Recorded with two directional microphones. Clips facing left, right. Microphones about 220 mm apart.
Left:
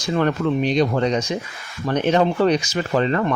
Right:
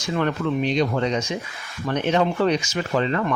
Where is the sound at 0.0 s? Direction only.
40° left (ahead or behind).